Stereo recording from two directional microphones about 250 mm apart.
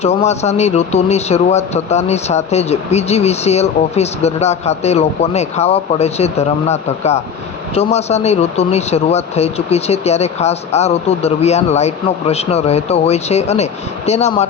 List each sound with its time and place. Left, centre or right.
0.0 s speech: left